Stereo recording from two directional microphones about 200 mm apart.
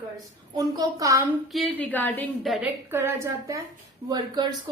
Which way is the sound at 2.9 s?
10° right (ahead or behind).